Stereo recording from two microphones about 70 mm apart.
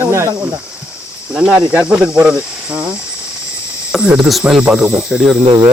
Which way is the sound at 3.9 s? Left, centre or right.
Centre.